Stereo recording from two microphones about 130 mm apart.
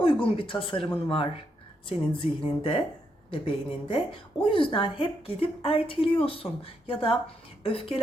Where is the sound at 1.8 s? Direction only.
40° left (ahead or behind).